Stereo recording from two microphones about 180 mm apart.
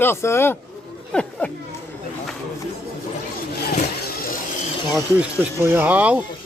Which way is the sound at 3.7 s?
55° left (ahead or behind).